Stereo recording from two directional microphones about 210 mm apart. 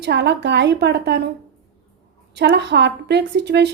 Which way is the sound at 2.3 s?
55° right (ahead or behind).